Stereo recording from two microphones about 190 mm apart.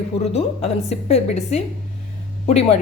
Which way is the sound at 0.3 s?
35° left (ahead or behind).